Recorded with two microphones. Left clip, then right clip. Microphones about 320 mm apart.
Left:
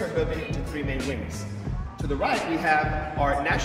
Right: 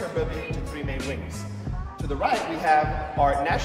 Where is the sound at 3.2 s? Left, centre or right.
Right.